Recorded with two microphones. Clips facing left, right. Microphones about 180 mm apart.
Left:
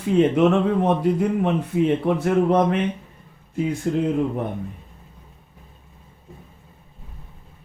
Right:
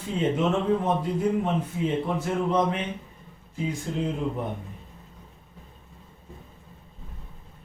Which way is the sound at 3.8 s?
60° left (ahead or behind).